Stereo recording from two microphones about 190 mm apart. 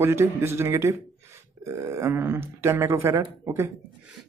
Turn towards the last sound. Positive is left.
turn(degrees=-15)  # may be behind; listen again after turning